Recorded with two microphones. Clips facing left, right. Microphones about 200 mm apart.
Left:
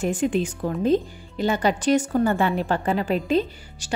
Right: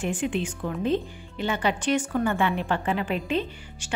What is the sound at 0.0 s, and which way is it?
A woman's voice, 40° left (ahead or behind).